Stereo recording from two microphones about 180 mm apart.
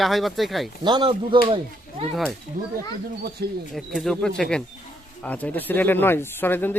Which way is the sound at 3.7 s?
Centre (ahead or behind).